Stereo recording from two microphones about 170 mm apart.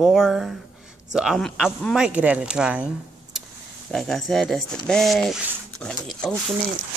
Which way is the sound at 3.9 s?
5° left (ahead or behind).